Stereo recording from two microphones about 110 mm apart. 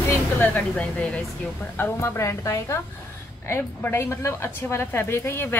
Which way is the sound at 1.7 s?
20° left (ahead or behind).